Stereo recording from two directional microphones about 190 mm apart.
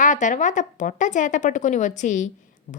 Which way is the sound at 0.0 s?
40° left (ahead or behind).